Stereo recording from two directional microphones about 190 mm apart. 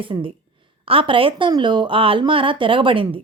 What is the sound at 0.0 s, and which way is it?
Speech, 25° right (ahead or behind).